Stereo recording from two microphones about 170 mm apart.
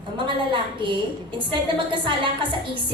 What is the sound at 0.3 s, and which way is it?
A woman's voice, 30° right (ahead or behind).